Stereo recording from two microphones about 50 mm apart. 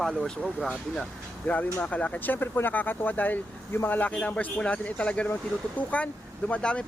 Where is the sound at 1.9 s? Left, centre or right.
Left.